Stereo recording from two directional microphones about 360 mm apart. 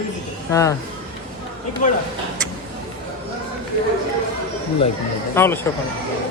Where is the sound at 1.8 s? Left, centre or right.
Left.